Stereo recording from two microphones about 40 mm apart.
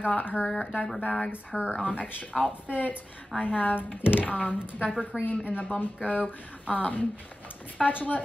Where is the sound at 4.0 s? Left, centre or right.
Left.